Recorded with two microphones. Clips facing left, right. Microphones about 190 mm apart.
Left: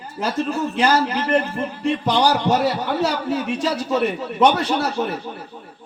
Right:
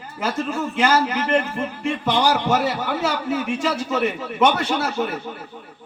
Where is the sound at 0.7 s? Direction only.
35° left (ahead or behind).